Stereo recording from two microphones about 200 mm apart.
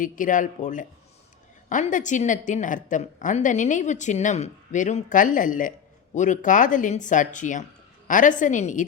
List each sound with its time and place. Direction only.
0.0 s a woman's voice: 40° left (ahead or behind)